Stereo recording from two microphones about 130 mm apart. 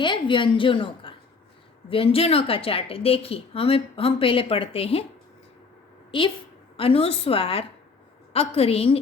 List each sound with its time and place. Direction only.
0.0 s a woman's voice: 40° left (ahead or behind)
6.1 s a woman's voice: 40° left (ahead or behind)